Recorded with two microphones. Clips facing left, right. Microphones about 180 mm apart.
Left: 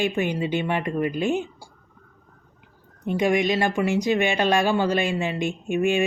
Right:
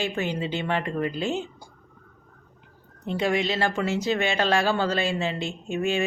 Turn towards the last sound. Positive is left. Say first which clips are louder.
# left 4 dB
turn(degrees=15)  # may be behind; listen again after turning